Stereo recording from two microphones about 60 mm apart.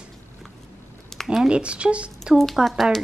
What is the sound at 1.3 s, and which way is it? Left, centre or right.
Speech, centre.